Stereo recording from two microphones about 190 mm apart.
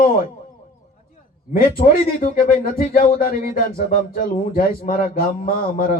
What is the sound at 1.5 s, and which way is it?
A man's voice, 50° left (ahead or behind).